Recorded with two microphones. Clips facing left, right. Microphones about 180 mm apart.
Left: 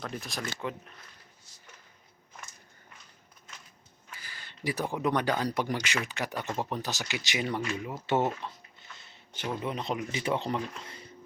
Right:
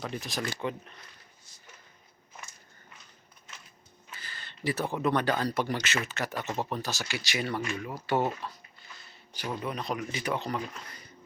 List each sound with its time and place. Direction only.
0.0 s speech: centre (ahead or behind)
4.1 s speech: 10° left (ahead or behind)
9.0 s a sound: 25° left (ahead or behind)
9.6 s speech: 25° left (ahead or behind)